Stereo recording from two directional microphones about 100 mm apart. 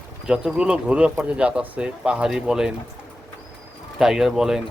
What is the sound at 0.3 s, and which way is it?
Speech, 10° right (ahead or behind).